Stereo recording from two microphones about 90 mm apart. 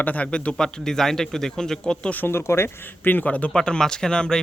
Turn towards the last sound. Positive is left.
turn(degrees=10)  # may be behind; listen again after turning